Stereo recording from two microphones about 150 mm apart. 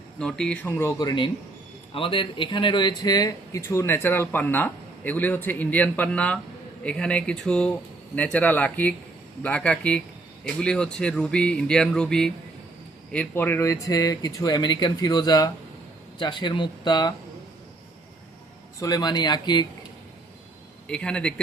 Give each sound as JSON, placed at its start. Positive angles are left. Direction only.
{"t": 0.2, "sound": "speech", "side_deg": 5}
{"t": 18.8, "sound": "speech", "side_deg": 25}
{"t": 20.8, "sound": "speech", "side_deg": 5}